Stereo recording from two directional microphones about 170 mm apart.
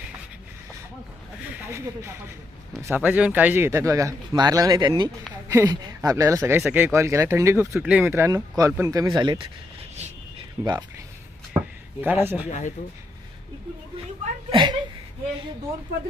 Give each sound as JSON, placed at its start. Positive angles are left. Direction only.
{"t": 1.7, "sound": "speech", "side_deg": -15}
{"t": 10.0, "sound": "a sound", "side_deg": -40}
{"t": 10.6, "sound": "speech", "side_deg": -20}
{"t": 12.0, "sound": "speech", "side_deg": -15}
{"t": 12.5, "sound": "speech", "side_deg": 45}
{"t": 14.5, "sound": "a sound", "side_deg": -25}